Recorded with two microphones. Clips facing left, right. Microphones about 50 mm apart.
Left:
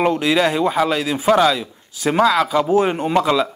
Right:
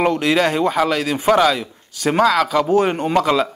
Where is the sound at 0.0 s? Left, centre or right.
Centre.